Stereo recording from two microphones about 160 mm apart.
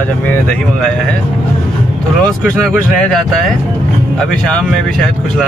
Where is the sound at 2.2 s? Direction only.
5° left (ahead or behind).